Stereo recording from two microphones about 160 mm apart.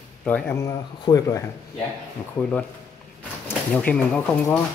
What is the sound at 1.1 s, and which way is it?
Speech, 25° left (ahead or behind).